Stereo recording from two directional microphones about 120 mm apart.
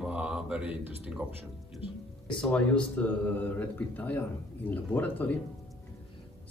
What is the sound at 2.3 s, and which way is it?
Speech, 10° left (ahead or behind).